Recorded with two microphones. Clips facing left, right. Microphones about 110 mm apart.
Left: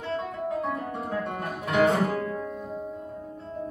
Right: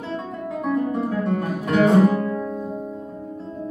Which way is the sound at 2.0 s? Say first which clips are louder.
Right 8 dB; 30° right (ahead or behind).